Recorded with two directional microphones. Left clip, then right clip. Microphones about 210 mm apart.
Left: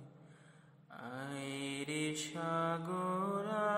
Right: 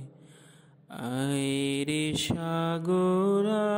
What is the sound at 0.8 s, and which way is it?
Mantra, 45° right (ahead or behind).